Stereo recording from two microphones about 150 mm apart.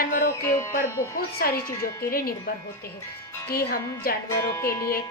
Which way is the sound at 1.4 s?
90° left.